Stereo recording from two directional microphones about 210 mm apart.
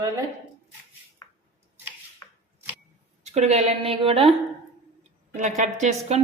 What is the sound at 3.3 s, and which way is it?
Speech, 30° right (ahead or behind).